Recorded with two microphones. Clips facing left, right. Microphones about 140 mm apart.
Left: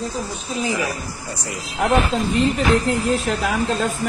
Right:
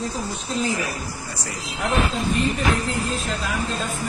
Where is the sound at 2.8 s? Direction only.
70° left (ahead or behind).